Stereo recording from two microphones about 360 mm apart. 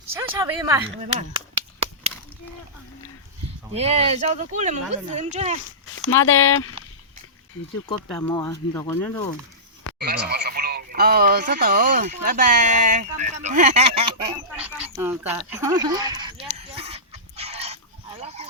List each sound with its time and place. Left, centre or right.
0.1 s speech: centre
3.8 s speech: centre
6.1 s speech: left
8.1 s speech: centre
10.0 s speech: right
16.6 s fowl: centre
18.2 s a sound: centre